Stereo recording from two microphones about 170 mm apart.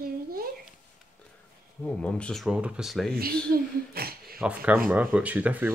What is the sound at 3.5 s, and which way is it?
Speech, 60° right (ahead or behind).